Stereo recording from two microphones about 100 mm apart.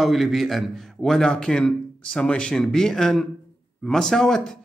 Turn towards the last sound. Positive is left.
turn(degrees=5)  # may be behind; listen again after turning